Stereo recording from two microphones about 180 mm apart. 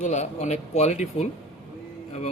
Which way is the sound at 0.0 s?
40° left (ahead or behind).